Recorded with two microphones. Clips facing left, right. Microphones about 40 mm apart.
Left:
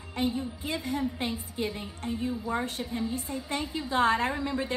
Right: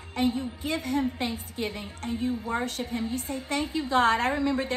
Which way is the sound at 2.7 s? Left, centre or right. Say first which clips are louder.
Right 1 dB; right.